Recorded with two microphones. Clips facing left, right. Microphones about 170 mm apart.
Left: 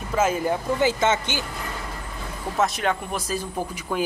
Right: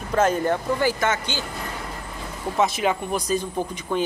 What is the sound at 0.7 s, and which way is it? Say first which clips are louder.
Speech: left 1 dB; 20° left (ahead or behind).